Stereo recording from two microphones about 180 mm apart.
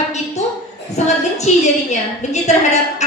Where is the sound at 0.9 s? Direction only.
40° left (ahead or behind).